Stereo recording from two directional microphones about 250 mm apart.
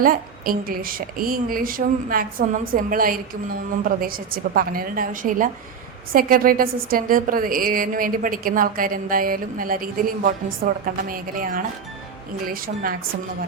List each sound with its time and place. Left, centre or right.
0.0 s a woman's voice: right